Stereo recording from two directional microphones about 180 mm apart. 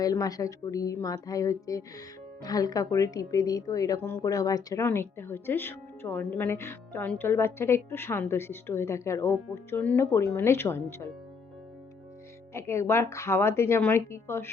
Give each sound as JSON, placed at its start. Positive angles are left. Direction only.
{"t": 0.0, "sound": "a woman's voice", "side_deg": 20}
{"t": 12.5, "sound": "a woman's voice", "side_deg": 15}